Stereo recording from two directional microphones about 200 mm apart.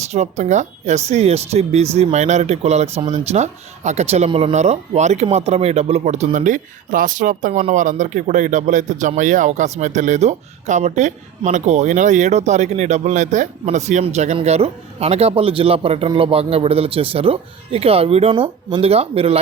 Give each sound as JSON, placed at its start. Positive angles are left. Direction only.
{"t": 0.0, "sound": "speech", "side_deg": -35}